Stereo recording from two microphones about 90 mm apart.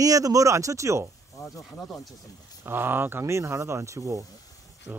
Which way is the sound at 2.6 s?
25° right (ahead or behind).